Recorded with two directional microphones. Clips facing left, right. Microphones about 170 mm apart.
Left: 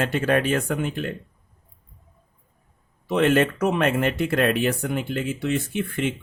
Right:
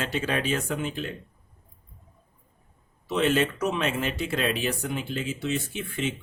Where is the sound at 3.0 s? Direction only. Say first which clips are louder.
Left 4 dB; 55° left (ahead or behind).